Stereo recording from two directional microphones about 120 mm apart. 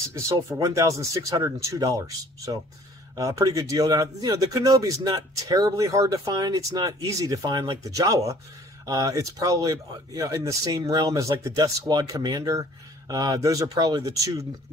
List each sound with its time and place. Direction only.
0.1 s speech: 25° right (ahead or behind)